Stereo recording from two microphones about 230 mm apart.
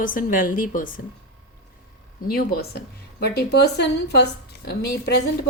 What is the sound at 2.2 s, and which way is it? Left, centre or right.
Speech, left.